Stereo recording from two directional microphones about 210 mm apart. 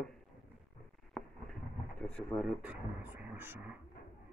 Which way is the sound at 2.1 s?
Centre (ahead or behind).